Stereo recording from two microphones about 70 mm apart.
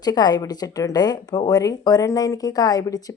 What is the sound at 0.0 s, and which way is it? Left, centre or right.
A woman's voice, left.